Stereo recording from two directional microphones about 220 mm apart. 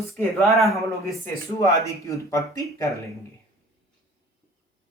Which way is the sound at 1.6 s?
15° left (ahead or behind).